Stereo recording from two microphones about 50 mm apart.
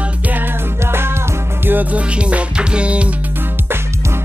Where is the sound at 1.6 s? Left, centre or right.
Right.